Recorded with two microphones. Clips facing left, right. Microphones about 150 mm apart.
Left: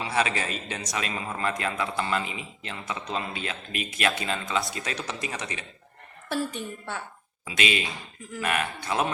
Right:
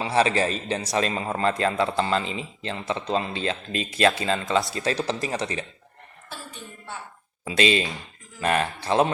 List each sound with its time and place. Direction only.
0.0 s a man's voice: 30° right (ahead or behind)
6.2 s a woman's voice: 65° left (ahead or behind)
7.4 s speech: 30° right (ahead or behind)